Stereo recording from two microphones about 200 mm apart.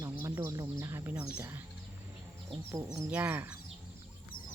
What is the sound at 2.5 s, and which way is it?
Speech, 15° right (ahead or behind).